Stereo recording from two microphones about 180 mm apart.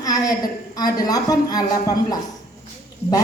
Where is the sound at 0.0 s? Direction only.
20° left (ahead or behind).